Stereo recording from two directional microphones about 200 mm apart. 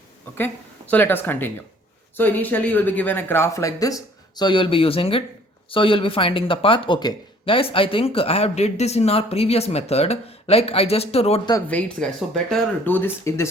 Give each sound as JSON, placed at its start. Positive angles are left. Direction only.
{"t": 0.3, "sound": "speech", "side_deg": 10}
{"t": 11.5, "sound": "speech", "side_deg": 5}